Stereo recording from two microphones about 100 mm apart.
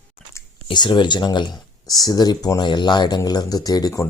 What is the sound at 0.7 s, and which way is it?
Speech, 50° left (ahead or behind).